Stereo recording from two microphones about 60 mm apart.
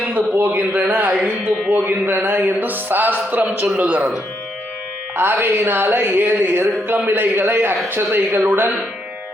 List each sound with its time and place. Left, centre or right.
0.1 s speech: right
5.1 s speech: right